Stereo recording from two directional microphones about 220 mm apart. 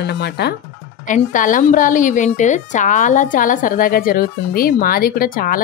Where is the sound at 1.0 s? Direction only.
35° left (ahead or behind).